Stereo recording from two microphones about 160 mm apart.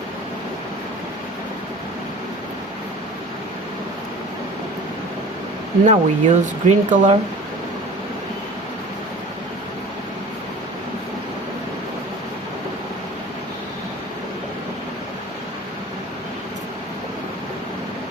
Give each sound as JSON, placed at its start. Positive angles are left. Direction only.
{"t": 5.8, "sound": "speech", "side_deg": -50}